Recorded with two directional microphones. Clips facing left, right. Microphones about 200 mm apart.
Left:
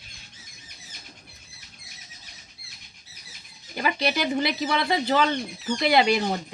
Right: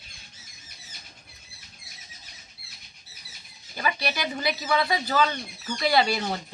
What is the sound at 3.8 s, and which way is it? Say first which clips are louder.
Speech: left 4 dB; 25° left (ahead or behind).